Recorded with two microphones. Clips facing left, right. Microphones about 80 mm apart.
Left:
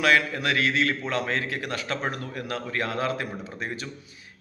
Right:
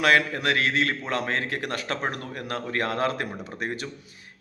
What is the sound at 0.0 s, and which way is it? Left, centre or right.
A man's voice, right.